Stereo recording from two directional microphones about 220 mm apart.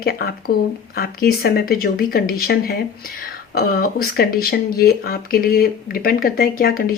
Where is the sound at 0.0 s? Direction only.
45° left (ahead or behind).